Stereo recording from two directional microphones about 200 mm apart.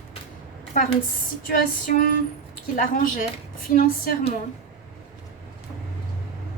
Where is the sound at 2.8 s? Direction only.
45° left (ahead or behind).